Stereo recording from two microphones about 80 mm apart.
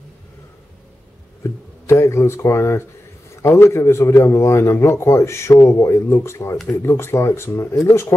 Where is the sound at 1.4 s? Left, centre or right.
Left.